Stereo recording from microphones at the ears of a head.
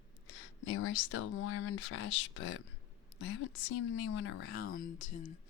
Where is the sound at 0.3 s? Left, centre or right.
Left.